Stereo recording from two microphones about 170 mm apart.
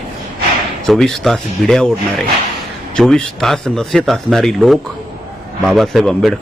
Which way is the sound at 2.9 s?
5° left (ahead or behind).